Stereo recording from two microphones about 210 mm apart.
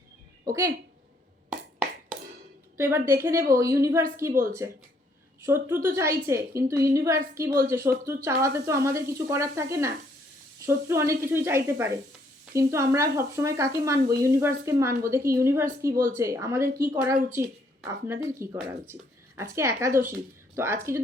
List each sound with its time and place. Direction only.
0.4 s speech: 15° right (ahead or behind)
1.5 s finger snapping: 5° right (ahead or behind)
2.7 s a woman's voice: 10° right (ahead or behind)